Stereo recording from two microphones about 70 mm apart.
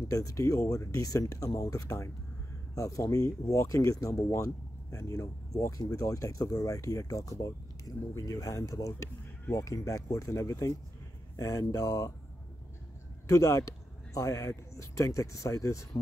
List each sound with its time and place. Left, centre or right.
0.1 s speech: left
13.3 s speech: left